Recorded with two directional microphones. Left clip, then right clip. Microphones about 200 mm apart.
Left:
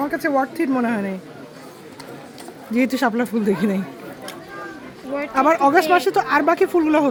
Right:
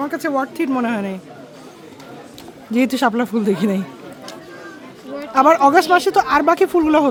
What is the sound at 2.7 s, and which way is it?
Speech, 15° right (ahead or behind).